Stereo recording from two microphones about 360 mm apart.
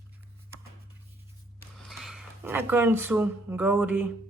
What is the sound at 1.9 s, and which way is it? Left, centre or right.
Speech, centre.